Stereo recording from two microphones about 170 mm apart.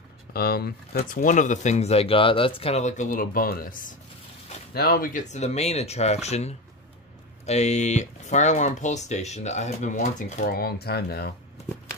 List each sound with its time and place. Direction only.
0.3 s speech: 65° left (ahead or behind)